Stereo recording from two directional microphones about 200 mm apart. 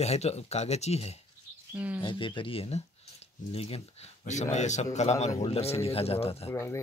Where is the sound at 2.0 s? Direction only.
25° left (ahead or behind).